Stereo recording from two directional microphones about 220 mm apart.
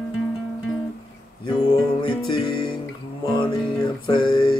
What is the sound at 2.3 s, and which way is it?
Music, 20° left (ahead or behind).